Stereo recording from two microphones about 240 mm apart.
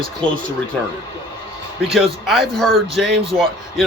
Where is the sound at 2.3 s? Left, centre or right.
Centre.